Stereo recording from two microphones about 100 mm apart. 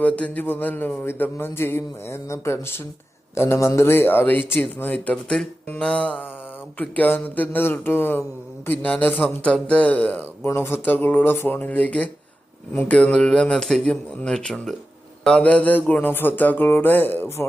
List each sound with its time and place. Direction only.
0.0 s a man's voice: 15° left (ahead or behind)